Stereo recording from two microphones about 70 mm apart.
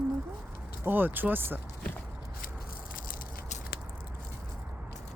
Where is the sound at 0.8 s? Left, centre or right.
Right.